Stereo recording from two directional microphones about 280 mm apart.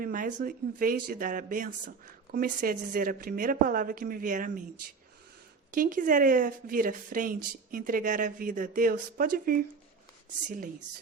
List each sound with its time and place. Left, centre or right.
0.0 s speech: right
5.7 s speech: right